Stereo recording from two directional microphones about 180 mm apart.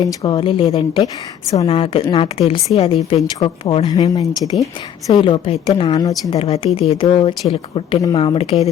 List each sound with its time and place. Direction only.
0.0 s a woman's voice: 20° left (ahead or behind)
1.6 s a woman's voice: 30° left (ahead or behind)